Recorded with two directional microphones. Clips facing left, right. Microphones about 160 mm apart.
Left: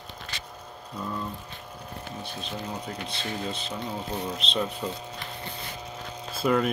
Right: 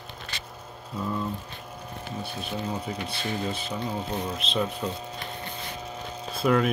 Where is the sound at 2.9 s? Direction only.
5° right (ahead or behind).